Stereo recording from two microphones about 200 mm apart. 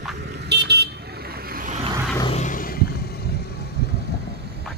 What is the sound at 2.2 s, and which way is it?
Vehicle, 35° left (ahead or behind).